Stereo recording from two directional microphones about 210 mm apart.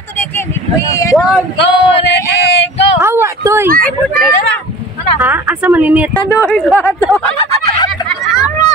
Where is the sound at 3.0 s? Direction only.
10° right (ahead or behind).